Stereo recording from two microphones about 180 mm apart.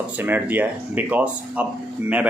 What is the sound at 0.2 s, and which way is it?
Speech, 10° right (ahead or behind).